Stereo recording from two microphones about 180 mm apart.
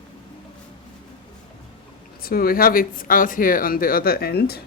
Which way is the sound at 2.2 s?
55° left (ahead or behind).